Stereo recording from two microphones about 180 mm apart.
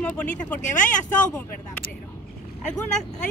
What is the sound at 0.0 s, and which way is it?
Speech, 5° left (ahead or behind).